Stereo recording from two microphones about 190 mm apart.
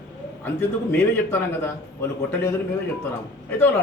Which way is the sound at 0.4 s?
10° left (ahead or behind).